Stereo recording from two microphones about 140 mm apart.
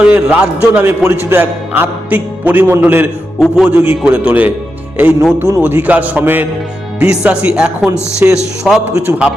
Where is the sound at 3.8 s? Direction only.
15° right (ahead or behind).